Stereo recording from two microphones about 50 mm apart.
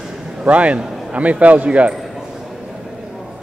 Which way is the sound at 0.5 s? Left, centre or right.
Right.